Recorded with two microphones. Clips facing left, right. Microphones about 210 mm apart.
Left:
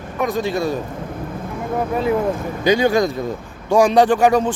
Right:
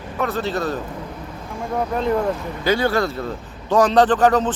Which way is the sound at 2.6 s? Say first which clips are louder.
Left 4 dB; 15° left (ahead or behind).